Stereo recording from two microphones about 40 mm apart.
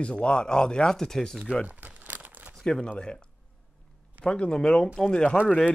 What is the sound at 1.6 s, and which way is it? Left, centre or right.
Crumpling, right.